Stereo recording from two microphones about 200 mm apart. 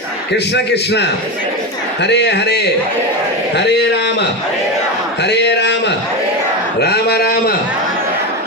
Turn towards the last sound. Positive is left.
turn(degrees=50)  # may be behind; listen again after turning